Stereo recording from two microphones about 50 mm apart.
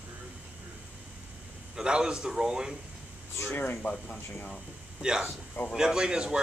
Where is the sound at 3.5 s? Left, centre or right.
Left.